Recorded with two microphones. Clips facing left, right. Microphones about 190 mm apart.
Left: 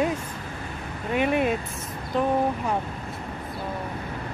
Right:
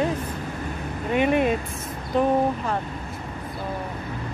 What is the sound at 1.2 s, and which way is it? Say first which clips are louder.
Speech: right 2 dB; centre (ahead or behind).